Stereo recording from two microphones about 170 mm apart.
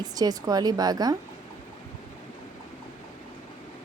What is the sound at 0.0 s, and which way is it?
Speech, 20° right (ahead or behind).